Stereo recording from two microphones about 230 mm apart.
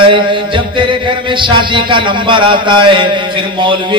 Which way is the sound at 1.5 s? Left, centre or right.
Right.